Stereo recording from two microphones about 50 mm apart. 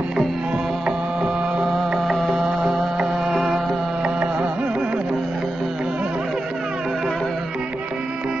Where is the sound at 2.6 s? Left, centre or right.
Centre.